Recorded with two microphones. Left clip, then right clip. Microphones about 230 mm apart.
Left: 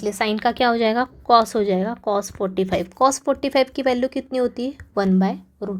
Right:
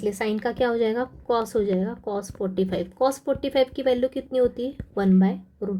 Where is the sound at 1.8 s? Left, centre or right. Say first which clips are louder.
Left 6 dB; centre.